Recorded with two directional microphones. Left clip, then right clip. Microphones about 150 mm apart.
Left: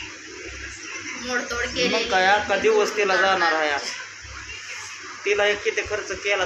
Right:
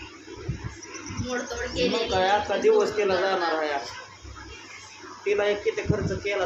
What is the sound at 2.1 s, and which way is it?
A man's voice, 20° left (ahead or behind).